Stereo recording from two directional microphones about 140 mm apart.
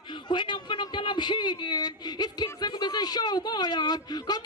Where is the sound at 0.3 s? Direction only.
35° left (ahead or behind).